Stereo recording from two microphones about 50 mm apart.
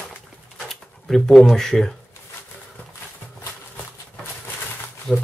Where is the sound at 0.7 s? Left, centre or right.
Centre.